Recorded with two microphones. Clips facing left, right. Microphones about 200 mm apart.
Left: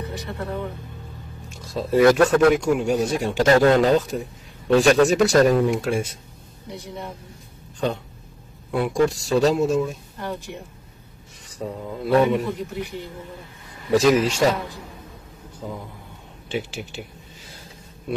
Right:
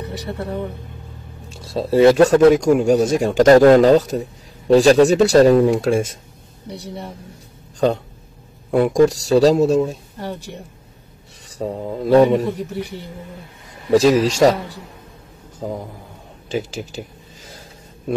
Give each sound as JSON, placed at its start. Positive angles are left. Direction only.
{"t": 0.1, "sound": "speech", "side_deg": -35}
{"t": 1.5, "sound": "a man's voice", "side_deg": -30}
{"t": 8.7, "sound": "a man's voice", "side_deg": -45}
{"t": 11.5, "sound": "a man's voice", "side_deg": -35}
{"t": 13.8, "sound": "a man's voice", "side_deg": -35}
{"t": 15.6, "sound": "a man's voice", "side_deg": -40}